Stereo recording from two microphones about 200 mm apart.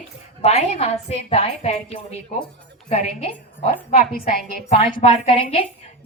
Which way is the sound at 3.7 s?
45° left (ahead or behind).